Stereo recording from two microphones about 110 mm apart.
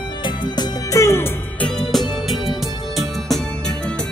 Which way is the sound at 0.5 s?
25° left (ahead or behind).